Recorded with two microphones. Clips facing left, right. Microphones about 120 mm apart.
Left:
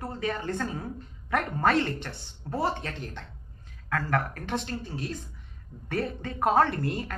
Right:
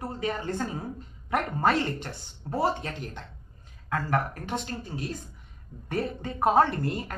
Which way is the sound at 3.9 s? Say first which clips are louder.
Even; 25° right (ahead or behind).